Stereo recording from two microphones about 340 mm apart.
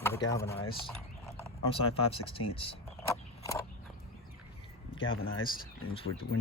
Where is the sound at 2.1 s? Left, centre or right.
Centre.